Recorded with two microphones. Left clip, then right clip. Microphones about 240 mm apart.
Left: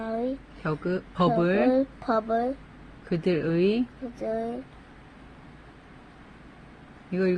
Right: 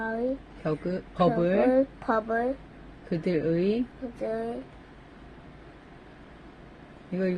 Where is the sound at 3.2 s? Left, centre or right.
Left.